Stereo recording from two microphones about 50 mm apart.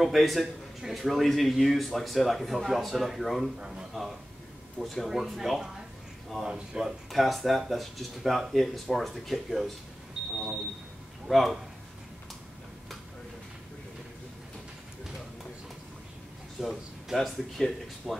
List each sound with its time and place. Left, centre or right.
0.0 s a man's voice: centre
3.5 s speech: centre
3.9 s a sound: centre
4.7 s a man's voice: centre
6.4 s speech: centre
7.1 s a man's voice: centre
11.2 s a man's voice: centre
16.6 s a man's voice: centre